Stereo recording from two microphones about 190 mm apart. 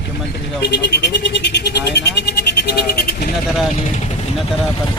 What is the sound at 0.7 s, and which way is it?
Speech, 65° left (ahead or behind).